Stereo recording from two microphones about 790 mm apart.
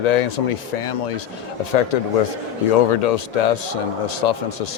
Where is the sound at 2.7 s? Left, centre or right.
Left.